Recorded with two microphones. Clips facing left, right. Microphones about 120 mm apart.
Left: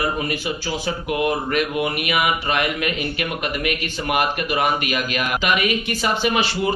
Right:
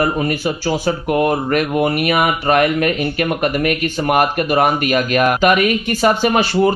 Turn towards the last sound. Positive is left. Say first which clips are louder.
# right 6 dB
turn(degrees=-45)  # may be behind; listen again after turning